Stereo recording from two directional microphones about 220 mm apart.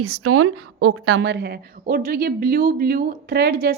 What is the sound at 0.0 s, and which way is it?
A woman's voice, 90° right.